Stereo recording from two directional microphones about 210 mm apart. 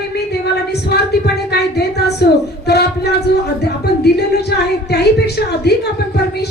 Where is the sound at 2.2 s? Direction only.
50° left (ahead or behind).